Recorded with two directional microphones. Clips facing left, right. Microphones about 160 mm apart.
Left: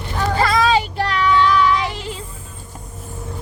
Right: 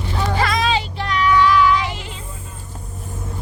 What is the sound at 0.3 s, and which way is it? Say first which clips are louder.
Child singing: left 4 dB; 35° left (ahead or behind).